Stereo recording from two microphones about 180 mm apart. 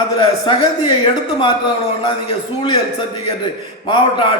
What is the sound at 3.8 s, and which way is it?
Speech, 25° left (ahead or behind).